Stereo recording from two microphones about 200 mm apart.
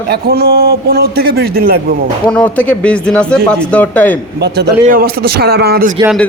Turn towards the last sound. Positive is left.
turn(degrees=-50)  # may be behind; listen again after turning